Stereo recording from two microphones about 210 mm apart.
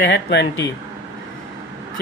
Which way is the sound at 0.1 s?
55° left (ahead or behind).